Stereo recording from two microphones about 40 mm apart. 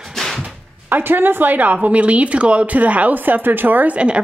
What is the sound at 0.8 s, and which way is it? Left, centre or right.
Speech, right.